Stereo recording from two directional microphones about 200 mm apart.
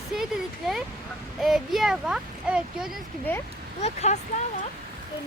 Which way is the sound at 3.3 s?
10° left (ahead or behind).